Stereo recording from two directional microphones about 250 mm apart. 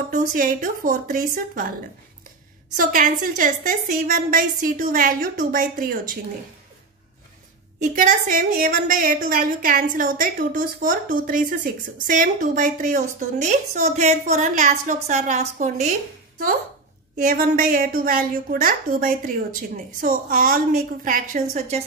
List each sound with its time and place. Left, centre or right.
0.1 s a woman's voice: right
2.8 s a woman's voice: right
7.8 s a woman's voice: right
17.2 s a woman's voice: right